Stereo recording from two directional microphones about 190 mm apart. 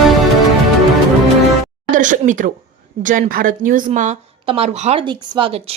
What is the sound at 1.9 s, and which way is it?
A woman's voice, 40° right (ahead or behind).